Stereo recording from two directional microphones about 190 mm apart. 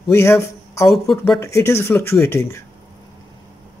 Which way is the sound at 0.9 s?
Centre (ahead or behind).